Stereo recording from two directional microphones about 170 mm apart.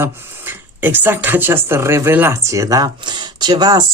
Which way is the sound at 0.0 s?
10° right (ahead or behind).